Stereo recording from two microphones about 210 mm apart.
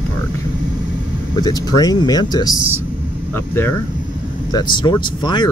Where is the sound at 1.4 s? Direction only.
20° left (ahead or behind).